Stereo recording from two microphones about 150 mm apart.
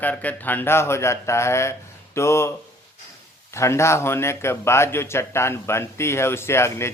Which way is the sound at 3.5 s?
20° left (ahead or behind).